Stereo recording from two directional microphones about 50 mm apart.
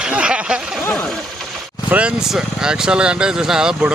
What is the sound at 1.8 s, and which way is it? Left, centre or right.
Speech, right.